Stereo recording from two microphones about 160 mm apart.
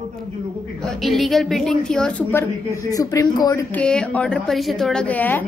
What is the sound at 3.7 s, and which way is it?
A woman's voice, 5° left (ahead or behind).